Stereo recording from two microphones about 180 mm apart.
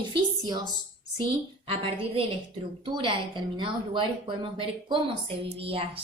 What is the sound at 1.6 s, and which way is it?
A woman's voice, 30° right (ahead or behind).